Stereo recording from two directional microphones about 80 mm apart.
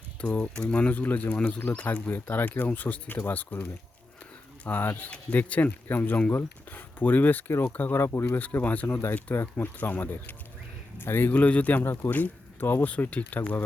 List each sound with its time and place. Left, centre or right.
0.2 s speech: centre
9.3 s speech: left
9.7 s speech: left
11.8 s speech: left